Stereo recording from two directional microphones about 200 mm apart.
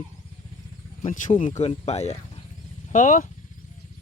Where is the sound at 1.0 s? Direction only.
35° left (ahead or behind).